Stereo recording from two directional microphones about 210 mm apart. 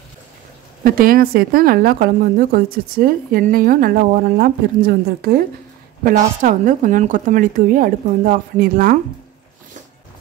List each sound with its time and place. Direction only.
0.8 s a woman's voice: 45° right (ahead or behind)